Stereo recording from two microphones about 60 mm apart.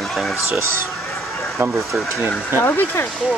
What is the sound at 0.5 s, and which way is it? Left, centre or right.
Speech, right.